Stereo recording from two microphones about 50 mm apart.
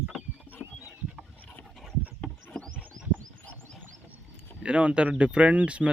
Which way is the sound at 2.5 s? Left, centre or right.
Centre.